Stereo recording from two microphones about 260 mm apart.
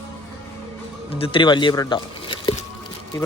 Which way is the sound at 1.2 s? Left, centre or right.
Centre.